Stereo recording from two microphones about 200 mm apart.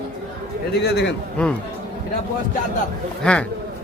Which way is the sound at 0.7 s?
55° left (ahead or behind).